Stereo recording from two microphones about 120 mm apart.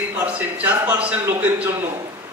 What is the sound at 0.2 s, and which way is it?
A man's voice, 15° right (ahead or behind).